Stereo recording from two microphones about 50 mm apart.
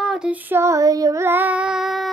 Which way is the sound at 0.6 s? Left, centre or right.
Right.